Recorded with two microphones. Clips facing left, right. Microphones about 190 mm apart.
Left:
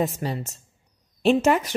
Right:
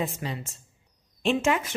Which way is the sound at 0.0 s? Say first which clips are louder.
Left 5 dB; 40° left (ahead or behind).